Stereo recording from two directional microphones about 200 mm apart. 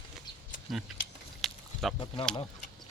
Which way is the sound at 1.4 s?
Centre (ahead or behind).